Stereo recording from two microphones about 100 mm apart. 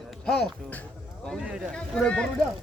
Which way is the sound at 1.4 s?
5° right (ahead or behind).